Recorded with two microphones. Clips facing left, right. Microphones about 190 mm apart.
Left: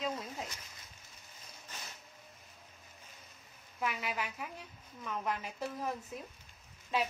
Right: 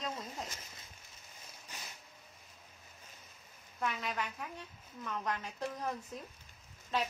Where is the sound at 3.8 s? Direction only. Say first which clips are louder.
Even; 5° left (ahead or behind).